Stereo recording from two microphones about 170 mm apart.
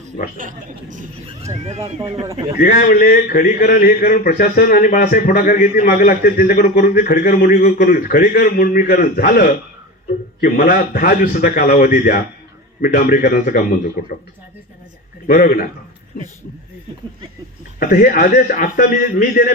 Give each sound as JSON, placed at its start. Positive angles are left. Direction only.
{"t": 0.3, "sound": "a man's voice", "side_deg": -50}
{"t": 2.6, "sound": "a man's voice", "side_deg": 60}
{"t": 15.3, "sound": "a man's voice", "side_deg": 60}
{"t": 17.7, "sound": "a man's voice", "side_deg": 55}